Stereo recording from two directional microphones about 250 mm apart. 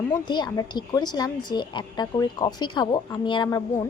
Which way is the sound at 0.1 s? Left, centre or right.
Centre.